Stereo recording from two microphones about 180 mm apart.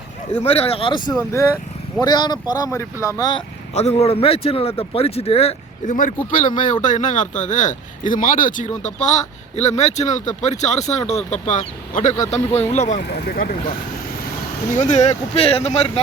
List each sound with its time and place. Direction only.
0.3 s speech: 35° left (ahead or behind)
3.8 s speech: 35° left (ahead or behind)
13.0 s speech: 65° left (ahead or behind)
14.8 s speech: 40° left (ahead or behind)